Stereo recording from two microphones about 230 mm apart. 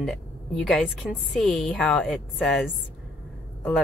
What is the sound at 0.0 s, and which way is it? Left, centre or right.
Speech, centre.